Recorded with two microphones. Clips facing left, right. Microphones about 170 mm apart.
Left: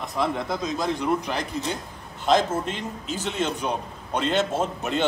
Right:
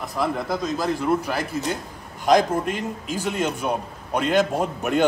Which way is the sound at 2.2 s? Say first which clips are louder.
Right 3 dB; 15° right (ahead or behind).